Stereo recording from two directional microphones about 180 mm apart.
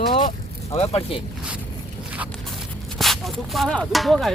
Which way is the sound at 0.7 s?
35° left (ahead or behind).